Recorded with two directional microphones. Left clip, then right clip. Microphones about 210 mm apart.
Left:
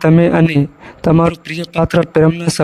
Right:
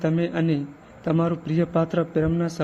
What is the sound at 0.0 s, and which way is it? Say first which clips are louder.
Speech: left 13 dB; 50° left (ahead or behind).